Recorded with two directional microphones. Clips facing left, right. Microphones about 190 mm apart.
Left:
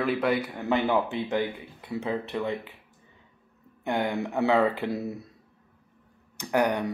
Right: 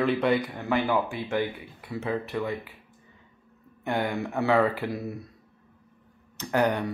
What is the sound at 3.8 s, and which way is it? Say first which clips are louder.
Speech: even; 15° left (ahead or behind).